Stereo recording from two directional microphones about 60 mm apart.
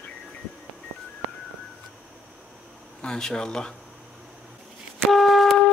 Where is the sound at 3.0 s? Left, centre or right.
Centre.